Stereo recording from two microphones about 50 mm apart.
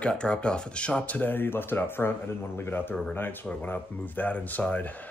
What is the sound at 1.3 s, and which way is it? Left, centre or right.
Speech, left.